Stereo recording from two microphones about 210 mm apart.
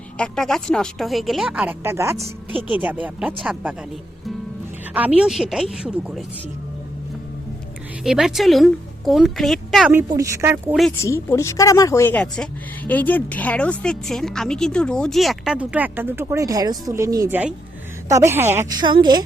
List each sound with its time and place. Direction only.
0.2 s speech: centre (ahead or behind)
4.9 s speech: 5° right (ahead or behind)
8.0 s a woman's voice: centre (ahead or behind)
9.9 s a woman's voice: 15° right (ahead or behind)
11.0 s a woman's voice: 15° left (ahead or behind); by 19.2 s 20° right (ahead or behind)